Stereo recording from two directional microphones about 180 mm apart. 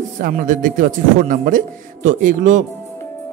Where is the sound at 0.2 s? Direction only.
50° right (ahead or behind).